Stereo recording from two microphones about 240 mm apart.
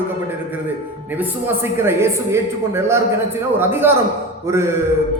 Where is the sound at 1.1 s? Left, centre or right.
Centre.